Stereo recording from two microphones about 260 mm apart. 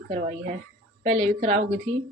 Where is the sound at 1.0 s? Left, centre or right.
Right.